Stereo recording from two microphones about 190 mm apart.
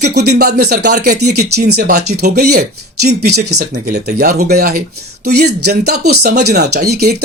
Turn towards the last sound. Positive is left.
turn(degrees=-60)  # may be behind; listen again after turning